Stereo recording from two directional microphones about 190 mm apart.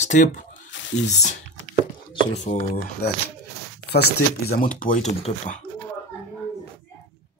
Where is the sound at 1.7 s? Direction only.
75° right (ahead or behind).